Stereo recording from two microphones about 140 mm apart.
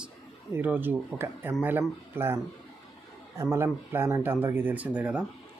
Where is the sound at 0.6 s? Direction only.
15° right (ahead or behind).